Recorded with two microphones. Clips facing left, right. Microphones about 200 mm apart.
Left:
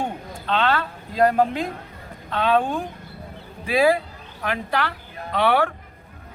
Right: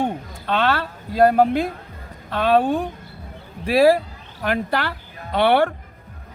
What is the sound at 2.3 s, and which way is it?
Speech, 45° right (ahead or behind).